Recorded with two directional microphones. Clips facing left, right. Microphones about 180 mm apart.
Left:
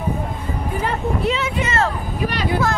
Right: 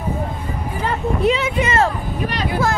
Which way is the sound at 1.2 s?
15° right (ahead or behind).